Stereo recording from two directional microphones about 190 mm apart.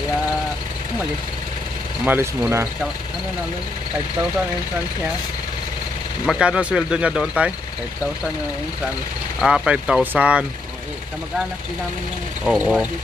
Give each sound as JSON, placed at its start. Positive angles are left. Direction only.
{"t": 2.0, "sound": "speech", "side_deg": -10}
{"t": 6.2, "sound": "speech", "side_deg": -5}
{"t": 9.4, "sound": "speech", "side_deg": -5}
{"t": 12.4, "sound": "speech", "side_deg": -5}